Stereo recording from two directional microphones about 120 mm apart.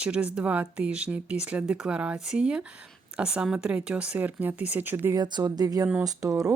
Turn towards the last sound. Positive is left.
turn(degrees=-30)  # may be behind; listen again after turning